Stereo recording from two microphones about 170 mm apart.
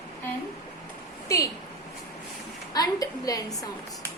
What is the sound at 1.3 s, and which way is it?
Speech, 20° left (ahead or behind).